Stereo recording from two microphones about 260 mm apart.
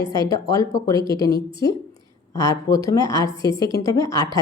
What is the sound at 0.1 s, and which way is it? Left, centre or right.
Speech, centre.